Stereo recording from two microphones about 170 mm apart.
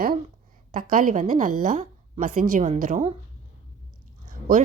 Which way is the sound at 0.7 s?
55° right (ahead or behind).